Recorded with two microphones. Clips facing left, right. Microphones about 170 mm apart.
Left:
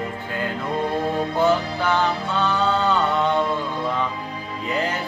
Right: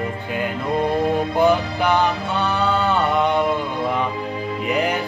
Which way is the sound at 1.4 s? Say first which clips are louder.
Right 2 dB; 15° right (ahead or behind).